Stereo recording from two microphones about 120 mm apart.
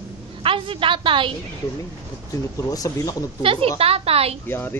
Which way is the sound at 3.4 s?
50° right (ahead or behind).